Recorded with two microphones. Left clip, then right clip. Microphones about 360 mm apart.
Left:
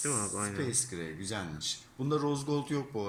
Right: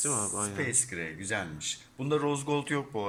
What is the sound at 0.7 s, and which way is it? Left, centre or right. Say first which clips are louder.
Speech: right 3 dB; right.